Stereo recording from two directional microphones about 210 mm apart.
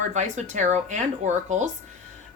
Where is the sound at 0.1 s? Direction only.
35° right (ahead or behind).